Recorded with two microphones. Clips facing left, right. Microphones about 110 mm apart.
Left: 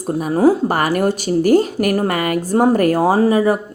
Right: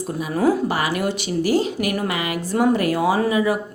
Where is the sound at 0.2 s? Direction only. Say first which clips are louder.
Left 5 dB; 40° left (ahead or behind).